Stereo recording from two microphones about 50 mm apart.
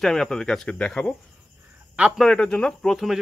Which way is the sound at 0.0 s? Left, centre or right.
Centre.